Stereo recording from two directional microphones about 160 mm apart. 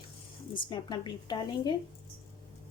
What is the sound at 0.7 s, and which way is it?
A woman's voice, 25° left (ahead or behind).